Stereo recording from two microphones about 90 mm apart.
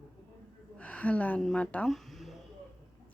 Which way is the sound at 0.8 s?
15° left (ahead or behind).